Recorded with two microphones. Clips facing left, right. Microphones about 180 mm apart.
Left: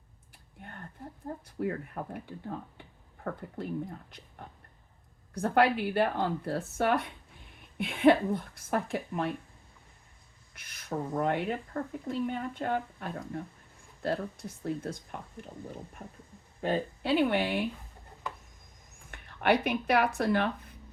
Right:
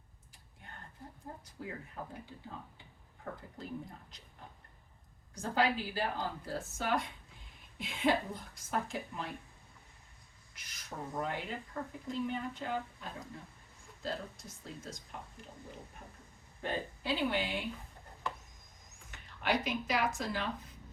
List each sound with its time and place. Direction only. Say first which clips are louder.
1.5 s speech: left 13 dB; 60° left (ahead or behind)
5.3 s speech: left 7 dB; 60° left (ahead or behind)
10.5 s speech: left 11 dB; 55° left (ahead or behind)
17.0 s speech: left 7 dB; 60° left (ahead or behind)
18.9 s a sound: left 6 dB; 55° left (ahead or behind)
19.6 s speech: left 7 dB; 60° left (ahead or behind)